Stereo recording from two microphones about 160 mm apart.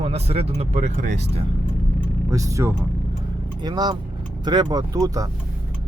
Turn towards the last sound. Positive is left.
turn(degrees=-20)  # may be behind; listen again after turning